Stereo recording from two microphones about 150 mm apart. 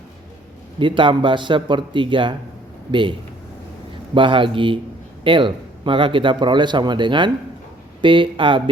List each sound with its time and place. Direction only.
0.8 s a man's voice: 35° right (ahead or behind)